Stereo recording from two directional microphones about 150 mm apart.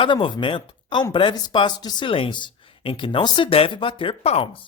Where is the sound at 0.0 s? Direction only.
35° left (ahead or behind).